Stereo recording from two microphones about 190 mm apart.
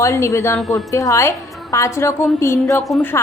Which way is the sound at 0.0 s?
15° left (ahead or behind).